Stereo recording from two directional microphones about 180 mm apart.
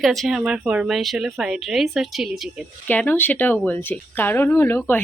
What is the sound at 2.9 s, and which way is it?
Speech, 10° left (ahead or behind).